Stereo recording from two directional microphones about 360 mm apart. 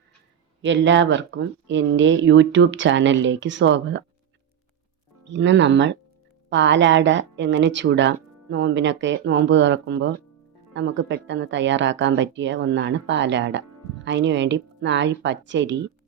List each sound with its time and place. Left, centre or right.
0.6 s speech: right
5.2 s speech: right